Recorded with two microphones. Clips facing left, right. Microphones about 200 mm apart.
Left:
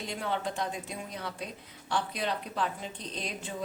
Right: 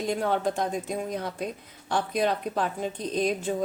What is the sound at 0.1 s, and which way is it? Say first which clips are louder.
A woman's voice: right 7 dB; 45° right (ahead or behind).